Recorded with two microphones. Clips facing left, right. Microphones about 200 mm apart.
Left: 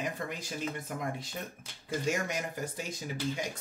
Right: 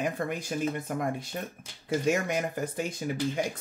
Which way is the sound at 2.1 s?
55° right (ahead or behind).